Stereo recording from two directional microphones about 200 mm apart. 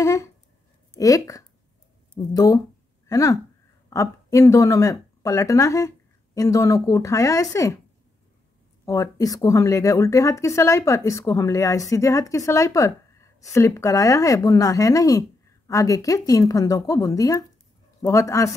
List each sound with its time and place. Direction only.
0.0 s a sound: 15° left (ahead or behind)
0.9 s speech: 15° left (ahead or behind)
8.8 s speech: 15° left (ahead or behind)